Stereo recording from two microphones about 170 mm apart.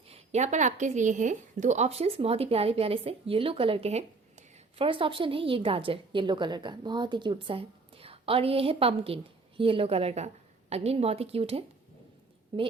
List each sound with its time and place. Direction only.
0.1 s a woman's voice: 40° right (ahead or behind)